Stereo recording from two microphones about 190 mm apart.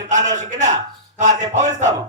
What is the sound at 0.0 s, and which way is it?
A man's voice, 40° right (ahead or behind).